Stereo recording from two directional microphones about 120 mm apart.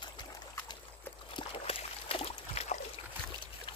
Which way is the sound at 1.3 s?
50° left (ahead or behind).